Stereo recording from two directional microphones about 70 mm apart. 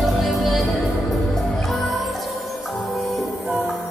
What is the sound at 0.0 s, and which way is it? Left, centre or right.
Music, centre.